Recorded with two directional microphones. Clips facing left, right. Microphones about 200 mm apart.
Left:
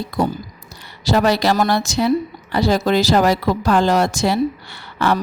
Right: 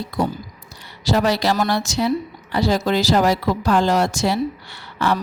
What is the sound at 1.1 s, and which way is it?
Speech, 60° left (ahead or behind).